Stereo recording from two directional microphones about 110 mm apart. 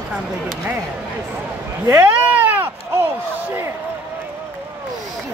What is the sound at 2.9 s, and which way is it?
Slam, 20° right (ahead or behind).